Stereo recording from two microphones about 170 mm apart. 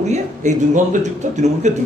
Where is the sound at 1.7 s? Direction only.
45° right (ahead or behind).